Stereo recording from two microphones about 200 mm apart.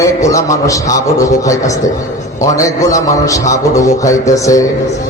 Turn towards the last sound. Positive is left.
turn(degrees=15)  # may be behind; listen again after turning